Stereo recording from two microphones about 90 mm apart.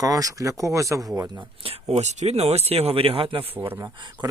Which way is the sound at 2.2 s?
90° right.